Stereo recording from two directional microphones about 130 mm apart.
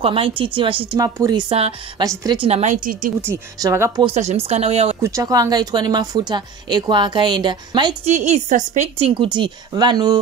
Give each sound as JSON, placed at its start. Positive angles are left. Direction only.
{"t": 0.0, "sound": "a woman's voice", "side_deg": -40}
{"t": 0.9, "sound": "speech", "side_deg": -30}
{"t": 1.5, "sound": "speech", "side_deg": -40}
{"t": 2.0, "sound": "speech", "side_deg": -30}
{"t": 2.4, "sound": "a woman's voice", "side_deg": -60}
{"t": 3.5, "sound": "speech", "side_deg": -25}
{"t": 4.1, "sound": "speech", "side_deg": -60}
{"t": 5.0, "sound": "speech", "side_deg": -25}
{"t": 8.0, "sound": "speech", "side_deg": -65}
{"t": 8.9, "sound": "speech", "side_deg": -45}